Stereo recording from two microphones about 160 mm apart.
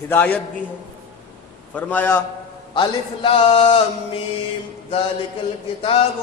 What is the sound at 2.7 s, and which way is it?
A man's voice, 30° left (ahead or behind).